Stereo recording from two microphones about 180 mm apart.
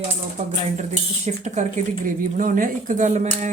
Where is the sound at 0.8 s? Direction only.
40° right (ahead or behind).